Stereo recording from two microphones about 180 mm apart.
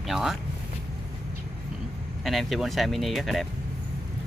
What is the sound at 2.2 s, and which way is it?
Speech, centre (ahead or behind).